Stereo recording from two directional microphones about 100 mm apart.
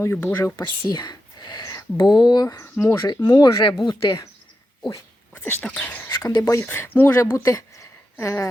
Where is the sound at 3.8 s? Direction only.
55° left (ahead or behind).